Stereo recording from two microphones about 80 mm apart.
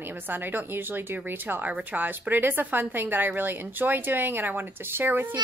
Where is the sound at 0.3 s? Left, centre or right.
Right.